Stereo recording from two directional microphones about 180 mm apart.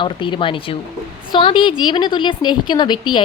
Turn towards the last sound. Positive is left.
turn(degrees=25)  # may be behind; listen again after turning